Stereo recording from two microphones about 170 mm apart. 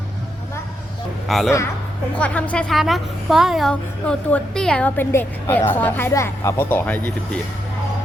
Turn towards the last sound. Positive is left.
turn(degrees=10)  # may be behind; listen again after turning